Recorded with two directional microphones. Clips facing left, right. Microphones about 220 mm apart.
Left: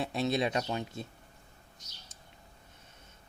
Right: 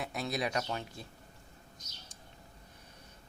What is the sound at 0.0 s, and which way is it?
Speech, 30° left (ahead or behind).